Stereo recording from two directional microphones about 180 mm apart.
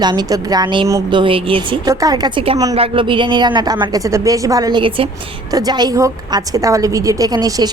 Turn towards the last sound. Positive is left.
turn(degrees=-20)  # may be behind; listen again after turning